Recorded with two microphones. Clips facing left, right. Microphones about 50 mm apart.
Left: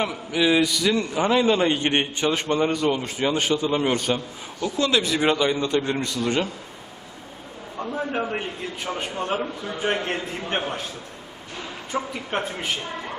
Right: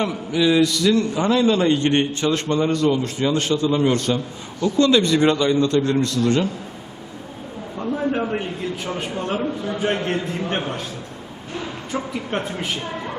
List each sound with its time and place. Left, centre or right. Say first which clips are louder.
0.0 s a man's voice: right 3 dB; centre
7.8 s a man's voice: right 4 dB; centre
11.9 s speech: right 1 dB; centre